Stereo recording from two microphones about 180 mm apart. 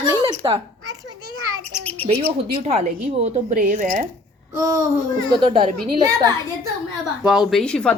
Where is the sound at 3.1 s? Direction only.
35° right (ahead or behind).